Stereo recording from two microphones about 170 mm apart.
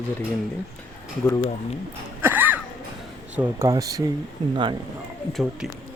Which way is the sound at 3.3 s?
15° right (ahead or behind).